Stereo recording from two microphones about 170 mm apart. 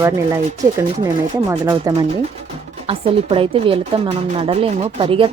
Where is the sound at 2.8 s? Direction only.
35° right (ahead or behind).